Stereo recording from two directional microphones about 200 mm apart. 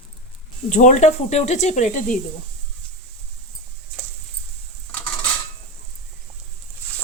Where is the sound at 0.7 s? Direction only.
40° left (ahead or behind).